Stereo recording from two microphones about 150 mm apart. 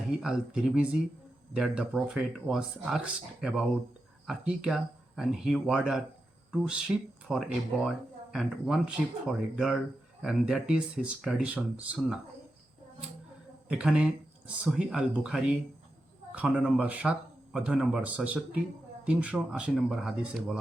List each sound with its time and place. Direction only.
0.1 s speech: 5° right (ahead or behind)
13.7 s speech: 5° right (ahead or behind)